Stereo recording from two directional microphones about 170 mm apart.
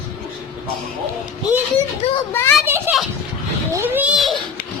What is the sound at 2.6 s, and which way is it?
Speech, 10° right (ahead or behind).